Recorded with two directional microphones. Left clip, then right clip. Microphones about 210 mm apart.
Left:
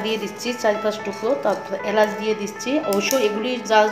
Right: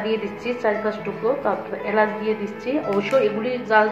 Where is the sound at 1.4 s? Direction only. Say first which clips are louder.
Left 2 dB; 60° left (ahead or behind).